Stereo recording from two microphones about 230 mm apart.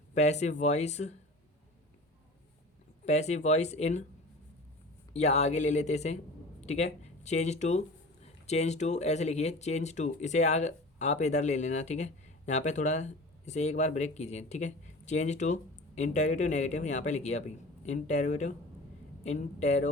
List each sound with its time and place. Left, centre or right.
0.1 s a woman's voice: left
3.1 s a woman's voice: left
5.1 s a woman's voice: left